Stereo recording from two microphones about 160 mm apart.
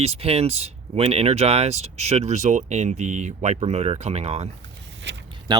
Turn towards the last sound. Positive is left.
turn(degrees=-25)  # may be behind; listen again after turning